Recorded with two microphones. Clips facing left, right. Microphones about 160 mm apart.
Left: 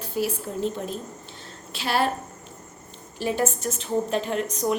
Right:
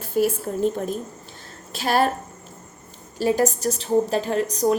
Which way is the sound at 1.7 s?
40° right (ahead or behind).